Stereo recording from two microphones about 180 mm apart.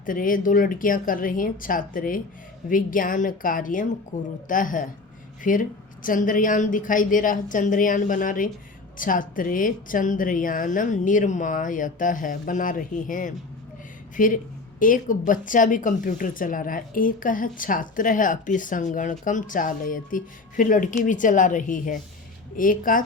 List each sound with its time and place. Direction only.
0.0 s a woman's voice: 50° left (ahead or behind)